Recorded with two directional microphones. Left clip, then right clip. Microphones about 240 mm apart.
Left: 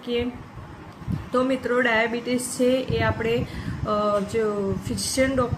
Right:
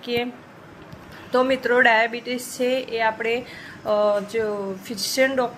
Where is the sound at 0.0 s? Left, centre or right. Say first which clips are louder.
Right 1 dB; centre.